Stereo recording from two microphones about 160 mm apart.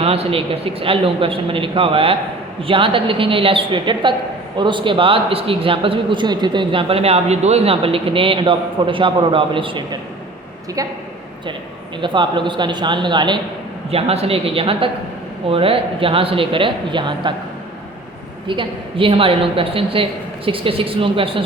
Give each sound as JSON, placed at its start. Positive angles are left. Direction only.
{"t": 0.0, "sound": "a man's voice", "side_deg": -40}
{"t": 11.9, "sound": "a man's voice", "side_deg": -30}
{"t": 18.4, "sound": "a man's voice", "side_deg": -30}